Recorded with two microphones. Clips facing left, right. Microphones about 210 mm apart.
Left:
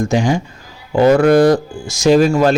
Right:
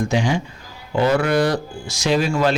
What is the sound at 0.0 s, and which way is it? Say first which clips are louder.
A man's voice: left 5 dB; 45° left (ahead or behind).